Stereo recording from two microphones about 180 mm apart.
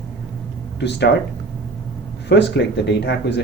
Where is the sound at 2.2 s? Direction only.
70° left (ahead or behind).